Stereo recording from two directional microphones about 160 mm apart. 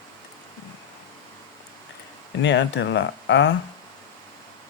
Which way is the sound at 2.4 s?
90° left.